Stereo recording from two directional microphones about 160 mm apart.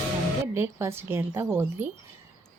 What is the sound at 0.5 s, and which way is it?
Speech, 15° right (ahead or behind).